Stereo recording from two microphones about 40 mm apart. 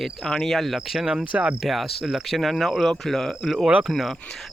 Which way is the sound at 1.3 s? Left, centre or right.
Right.